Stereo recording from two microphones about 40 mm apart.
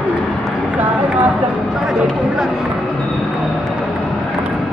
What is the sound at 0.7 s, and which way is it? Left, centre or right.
Speech, right.